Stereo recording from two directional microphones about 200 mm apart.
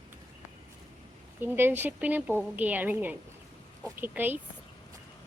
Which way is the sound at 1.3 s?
10° right (ahead or behind).